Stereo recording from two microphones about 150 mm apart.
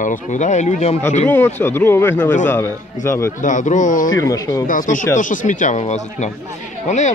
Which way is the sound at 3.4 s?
55° left (ahead or behind).